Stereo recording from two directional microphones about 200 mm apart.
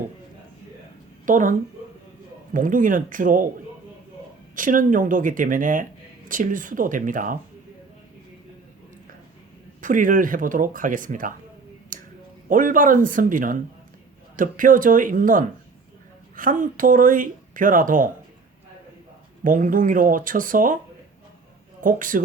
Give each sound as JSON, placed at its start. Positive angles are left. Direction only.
{"t": 1.2, "sound": "speech", "side_deg": -40}
{"t": 4.5, "sound": "speech", "side_deg": -40}
{"t": 9.8, "sound": "speech", "side_deg": -40}
{"t": 11.9, "sound": "a sound", "side_deg": -40}
{"t": 12.5, "sound": "speech", "side_deg": -40}
{"t": 19.5, "sound": "speech", "side_deg": -40}
{"t": 21.8, "sound": "speech", "side_deg": -40}